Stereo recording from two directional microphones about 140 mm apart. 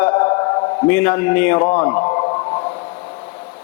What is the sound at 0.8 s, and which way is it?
Speech, 15° left (ahead or behind).